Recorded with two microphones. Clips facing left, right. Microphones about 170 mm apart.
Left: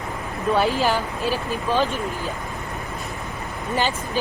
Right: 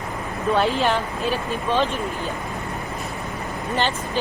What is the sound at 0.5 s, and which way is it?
Speech, 5° left (ahead or behind).